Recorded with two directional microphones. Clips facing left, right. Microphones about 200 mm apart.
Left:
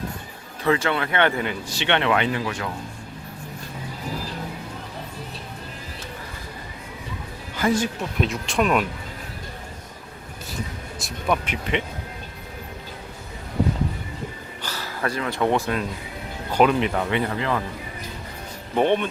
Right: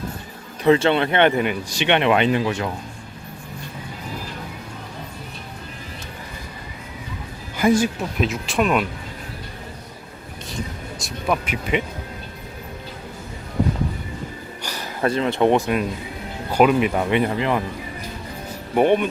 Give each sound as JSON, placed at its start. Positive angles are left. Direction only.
{"t": 0.6, "sound": "speech", "side_deg": -25}
{"t": 7.5, "sound": "speech", "side_deg": -10}
{"t": 11.0, "sound": "speech", "side_deg": -5}
{"t": 14.6, "sound": "speech", "side_deg": -15}
{"t": 18.7, "sound": "speech", "side_deg": -10}